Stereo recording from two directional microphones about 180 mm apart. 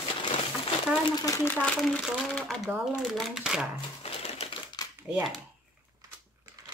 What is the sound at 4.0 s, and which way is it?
Typewriter, 35° left (ahead or behind).